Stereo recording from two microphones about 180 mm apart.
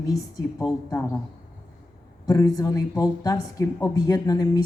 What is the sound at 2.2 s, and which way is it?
A woman's voice, 20° left (ahead or behind).